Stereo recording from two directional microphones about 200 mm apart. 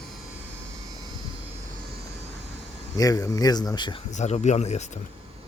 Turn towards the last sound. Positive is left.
turn(degrees=35)  # may be behind; listen again after turning